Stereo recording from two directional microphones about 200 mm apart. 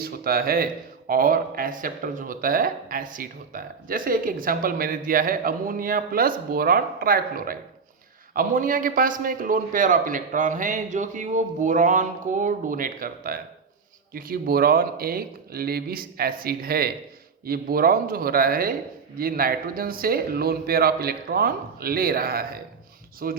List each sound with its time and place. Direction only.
0.0 s a man's voice: 50° right (ahead or behind)